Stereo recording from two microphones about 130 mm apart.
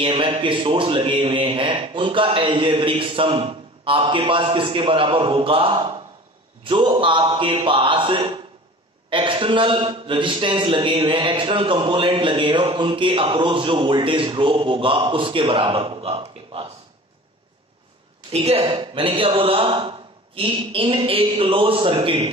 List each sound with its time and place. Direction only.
0.0 s speech: 40° right (ahead or behind)
18.3 s a man's voice: 50° right (ahead or behind)